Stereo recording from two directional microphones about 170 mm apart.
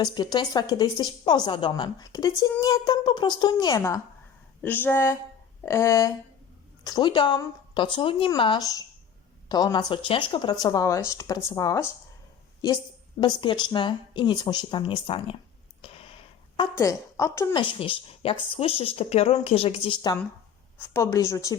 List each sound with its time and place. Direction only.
0.0 s a woman's voice: 25° left (ahead or behind)
13.1 s a woman's voice: 25° left (ahead or behind)
15.8 s a sound: 35° left (ahead or behind)
16.7 s speech: 20° left (ahead or behind)
17.5 s a woman's voice: 30° left (ahead or behind)